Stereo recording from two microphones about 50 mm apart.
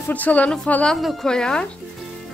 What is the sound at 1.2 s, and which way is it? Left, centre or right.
Speech, centre.